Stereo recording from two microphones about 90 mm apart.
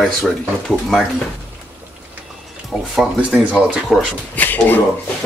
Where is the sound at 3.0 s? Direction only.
15° right (ahead or behind).